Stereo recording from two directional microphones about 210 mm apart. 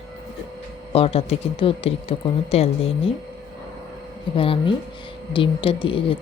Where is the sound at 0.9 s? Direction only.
30° left (ahead or behind).